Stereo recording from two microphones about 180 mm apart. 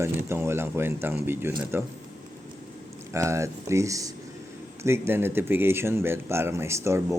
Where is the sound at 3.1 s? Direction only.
15° right (ahead or behind).